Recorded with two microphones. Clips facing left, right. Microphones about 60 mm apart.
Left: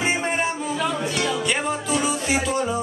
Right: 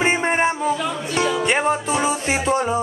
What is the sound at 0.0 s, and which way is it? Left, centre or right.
Music, right.